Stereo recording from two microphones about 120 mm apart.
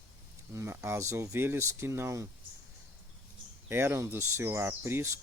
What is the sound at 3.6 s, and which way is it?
Speech, 20° right (ahead or behind).